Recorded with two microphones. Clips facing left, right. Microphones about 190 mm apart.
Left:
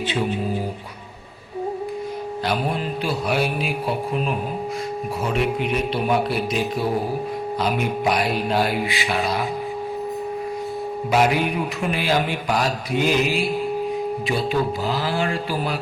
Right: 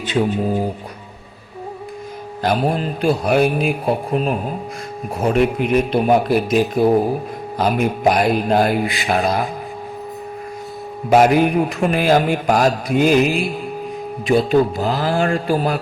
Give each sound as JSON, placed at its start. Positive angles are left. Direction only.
{"t": 2.4, "sound": "a man's voice", "side_deg": -45}
{"t": 11.1, "sound": "a man's voice", "side_deg": -45}